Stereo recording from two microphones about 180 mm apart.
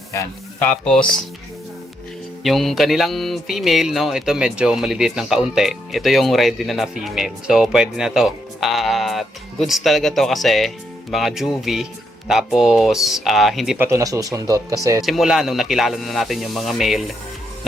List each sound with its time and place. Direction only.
0.1 s speech: 15° left (ahead or behind)
2.4 s speech: centre (ahead or behind)
13.7 s speech: 15° right (ahead or behind)
15.0 s speech: centre (ahead or behind)